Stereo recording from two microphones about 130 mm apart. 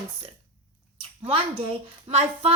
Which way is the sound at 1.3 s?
45° right (ahead or behind).